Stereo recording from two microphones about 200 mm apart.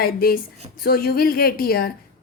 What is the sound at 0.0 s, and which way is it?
A woman's voice, 50° left (ahead or behind).